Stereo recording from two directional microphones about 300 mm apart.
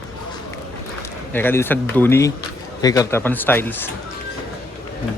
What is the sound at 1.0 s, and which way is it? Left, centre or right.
Speech, centre.